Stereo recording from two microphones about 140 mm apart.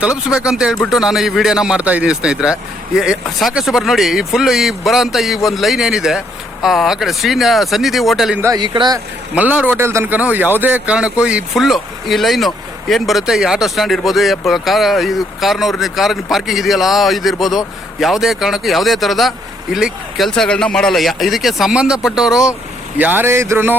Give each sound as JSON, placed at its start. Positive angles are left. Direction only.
{"t": 0.3, "sound": "a man's voice", "side_deg": -5}
{"t": 8.5, "sound": "speech", "side_deg": -35}
{"t": 9.3, "sound": "a man's voice", "side_deg": -10}